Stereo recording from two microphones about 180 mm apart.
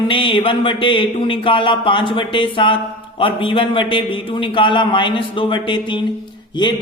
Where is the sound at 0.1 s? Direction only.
30° left (ahead or behind).